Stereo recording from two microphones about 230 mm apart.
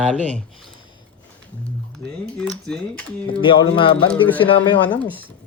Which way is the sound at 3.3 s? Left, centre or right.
Left.